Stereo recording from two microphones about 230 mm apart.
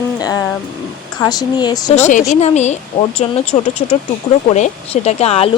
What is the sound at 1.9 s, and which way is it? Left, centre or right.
Speech, left.